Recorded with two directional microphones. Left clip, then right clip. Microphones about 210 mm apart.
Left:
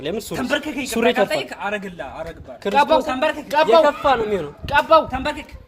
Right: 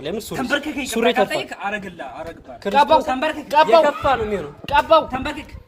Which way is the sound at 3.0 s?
40° left (ahead or behind).